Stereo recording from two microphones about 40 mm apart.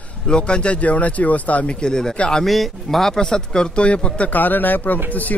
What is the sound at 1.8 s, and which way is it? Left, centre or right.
Speech, centre.